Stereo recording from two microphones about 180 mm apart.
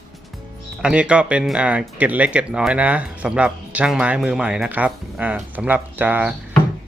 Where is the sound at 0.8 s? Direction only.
5° right (ahead or behind).